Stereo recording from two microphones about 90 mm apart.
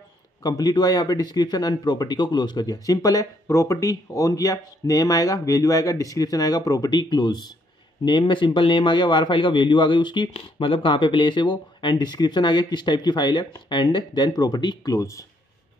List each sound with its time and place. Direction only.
0.4 s a man's voice: 45° left (ahead or behind)